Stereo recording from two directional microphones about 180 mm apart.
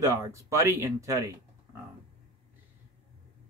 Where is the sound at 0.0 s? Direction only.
15° right (ahead or behind).